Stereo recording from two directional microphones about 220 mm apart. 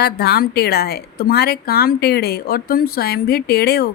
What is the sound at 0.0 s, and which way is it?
A woman's voice, 45° left (ahead or behind).